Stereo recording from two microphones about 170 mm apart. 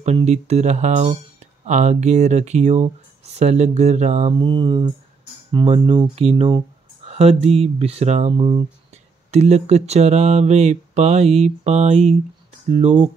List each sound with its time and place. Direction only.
0.0 s speech: 40° right (ahead or behind)
4.3 s speech: 30° right (ahead or behind)